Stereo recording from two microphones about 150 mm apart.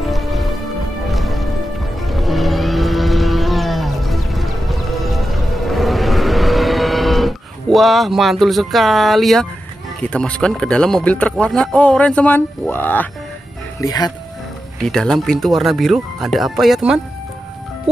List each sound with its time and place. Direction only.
0.0 s music: centre (ahead or behind)
2.0 s wild animals: centre (ahead or behind)
10.0 s speech: 5° left (ahead or behind)
13.7 s speech: 25° left (ahead or behind)
14.8 s speech: 5° left (ahead or behind)